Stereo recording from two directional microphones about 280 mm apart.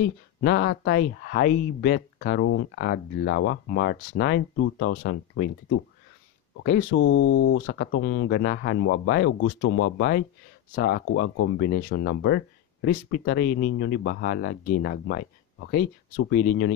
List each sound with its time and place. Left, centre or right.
0.4 s speech: left
6.9 s speech: left